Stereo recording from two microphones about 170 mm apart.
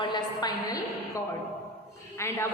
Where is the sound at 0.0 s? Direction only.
25° left (ahead or behind).